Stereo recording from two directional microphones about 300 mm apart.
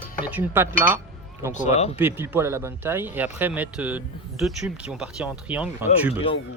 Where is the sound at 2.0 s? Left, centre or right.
Centre.